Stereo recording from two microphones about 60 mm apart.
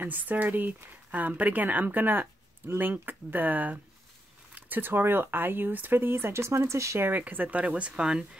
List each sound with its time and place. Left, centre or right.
0.0 s speech: right
7.0 s speech: right; by 8.3 s centre